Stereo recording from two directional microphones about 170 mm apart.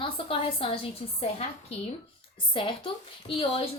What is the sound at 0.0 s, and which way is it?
A woman's voice, 30° left (ahead or behind).